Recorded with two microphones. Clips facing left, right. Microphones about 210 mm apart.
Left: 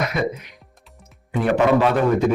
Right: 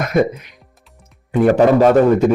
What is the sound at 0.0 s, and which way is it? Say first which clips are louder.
Music: right 7 dB; 45° right (ahead or behind).